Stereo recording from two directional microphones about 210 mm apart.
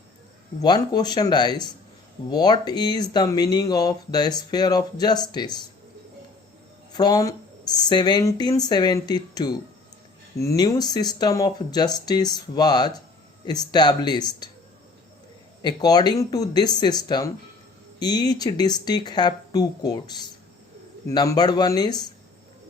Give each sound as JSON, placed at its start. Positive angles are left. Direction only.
{"t": 0.6, "sound": "speech", "side_deg": 20}
{"t": 6.9, "sound": "speech", "side_deg": 20}
{"t": 15.6, "sound": "speech", "side_deg": 20}